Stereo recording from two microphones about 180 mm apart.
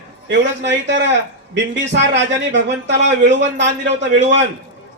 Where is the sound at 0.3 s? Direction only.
80° right.